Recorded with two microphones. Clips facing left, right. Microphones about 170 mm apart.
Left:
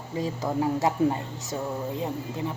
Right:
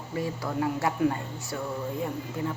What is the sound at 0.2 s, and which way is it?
Speech, 20° left (ahead or behind).